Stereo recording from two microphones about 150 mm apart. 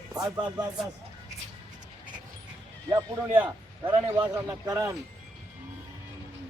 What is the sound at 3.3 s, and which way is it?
Speech, 10° right (ahead or behind).